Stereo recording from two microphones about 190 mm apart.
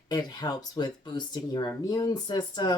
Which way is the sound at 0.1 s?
20° left (ahead or behind).